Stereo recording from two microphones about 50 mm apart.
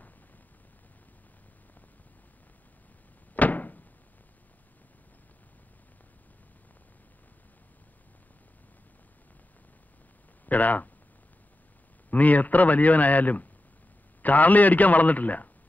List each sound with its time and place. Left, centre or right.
3.3 s door: left
10.4 s speech: left
12.1 s a man's voice: left